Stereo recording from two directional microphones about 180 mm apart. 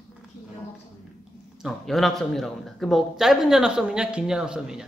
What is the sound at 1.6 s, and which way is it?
Speech, centre (ahead or behind).